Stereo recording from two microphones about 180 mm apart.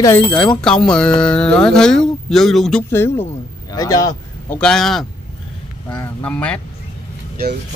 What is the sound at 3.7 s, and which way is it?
Speech, 20° left (ahead or behind).